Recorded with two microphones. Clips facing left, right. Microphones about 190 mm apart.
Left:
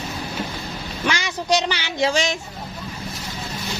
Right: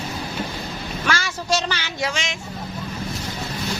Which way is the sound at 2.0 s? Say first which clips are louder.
Left 8 dB; 35° left (ahead or behind).